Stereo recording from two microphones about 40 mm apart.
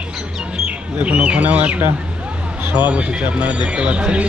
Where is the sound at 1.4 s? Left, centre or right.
Right.